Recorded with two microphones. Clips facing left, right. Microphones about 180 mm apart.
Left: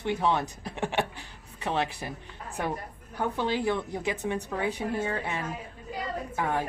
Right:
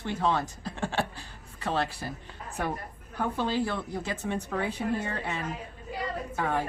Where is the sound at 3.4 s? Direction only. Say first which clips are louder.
Left 2 dB; 15° left (ahead or behind).